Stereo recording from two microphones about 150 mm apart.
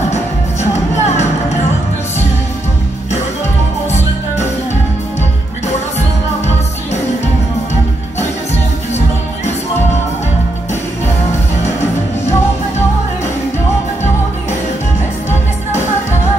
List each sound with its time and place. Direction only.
0.1 s music: 50° left (ahead or behind)
5.9 s music: 50° left (ahead or behind)